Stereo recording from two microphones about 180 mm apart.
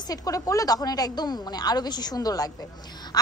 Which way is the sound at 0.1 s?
20° left (ahead or behind).